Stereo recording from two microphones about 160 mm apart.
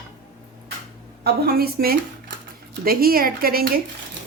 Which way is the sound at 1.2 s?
70° right (ahead or behind).